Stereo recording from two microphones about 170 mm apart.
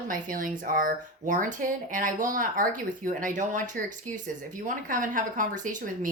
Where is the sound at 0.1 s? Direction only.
55° right (ahead or behind).